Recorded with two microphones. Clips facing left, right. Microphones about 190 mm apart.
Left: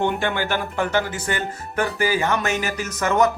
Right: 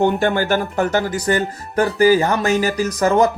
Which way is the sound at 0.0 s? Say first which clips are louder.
Right 6 dB; 40° right (ahead or behind).